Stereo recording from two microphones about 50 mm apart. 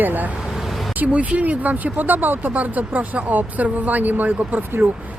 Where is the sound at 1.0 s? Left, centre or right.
Right.